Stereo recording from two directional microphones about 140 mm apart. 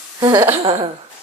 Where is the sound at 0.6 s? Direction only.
45° right (ahead or behind).